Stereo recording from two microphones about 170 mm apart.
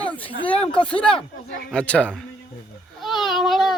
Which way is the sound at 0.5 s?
35° left (ahead or behind).